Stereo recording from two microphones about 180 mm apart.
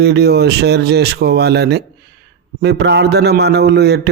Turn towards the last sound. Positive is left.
turn(degrees=-65)  # may be behind; listen again after turning